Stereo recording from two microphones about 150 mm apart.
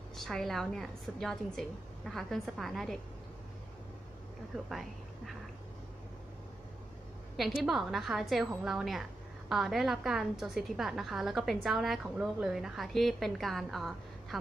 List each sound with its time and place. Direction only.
0.1 s a woman's voice: centre (ahead or behind)
4.6 s speech: centre (ahead or behind)
7.3 s a woman's voice: centre (ahead or behind)